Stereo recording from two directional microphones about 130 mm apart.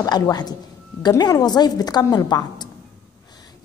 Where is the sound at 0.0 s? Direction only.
30° left (ahead or behind).